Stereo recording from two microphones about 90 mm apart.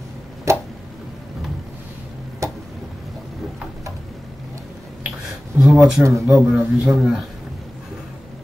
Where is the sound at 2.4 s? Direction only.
35° right (ahead or behind).